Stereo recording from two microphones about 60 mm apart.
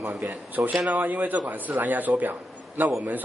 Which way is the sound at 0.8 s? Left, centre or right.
Right.